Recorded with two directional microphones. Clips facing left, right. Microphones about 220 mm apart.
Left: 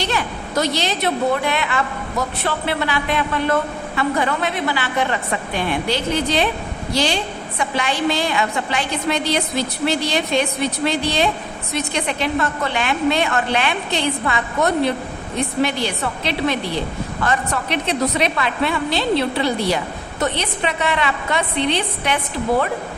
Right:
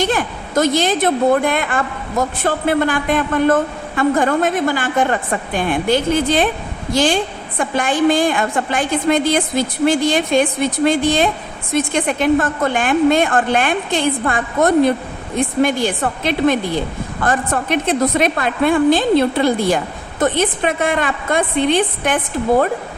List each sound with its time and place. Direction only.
0.0 s a woman's voice: 50° right (ahead or behind)